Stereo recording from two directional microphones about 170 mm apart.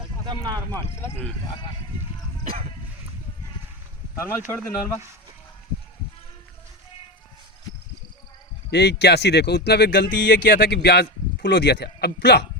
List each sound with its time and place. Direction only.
0.0 s a sound: 25° right (ahead or behind)
4.1 s speech: 15° left (ahead or behind)
8.7 s speech: 80° left